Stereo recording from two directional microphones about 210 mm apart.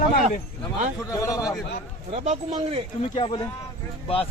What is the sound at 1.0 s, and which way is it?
Speech, 15° left (ahead or behind).